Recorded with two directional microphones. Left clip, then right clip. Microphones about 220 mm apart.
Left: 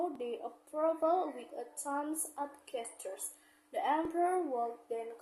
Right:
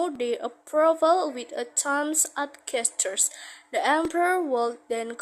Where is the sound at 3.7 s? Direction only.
45° right (ahead or behind).